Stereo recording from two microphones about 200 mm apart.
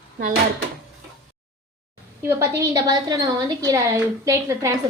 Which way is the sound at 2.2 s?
15° right (ahead or behind).